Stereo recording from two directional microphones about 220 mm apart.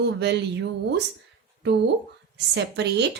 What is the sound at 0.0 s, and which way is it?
Speech, 50° right (ahead or behind).